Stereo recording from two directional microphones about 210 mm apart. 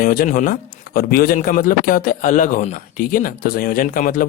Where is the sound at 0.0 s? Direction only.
45° left (ahead or behind).